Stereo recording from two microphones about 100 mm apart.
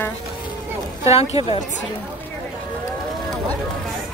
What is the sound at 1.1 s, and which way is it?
Speech, 90° left.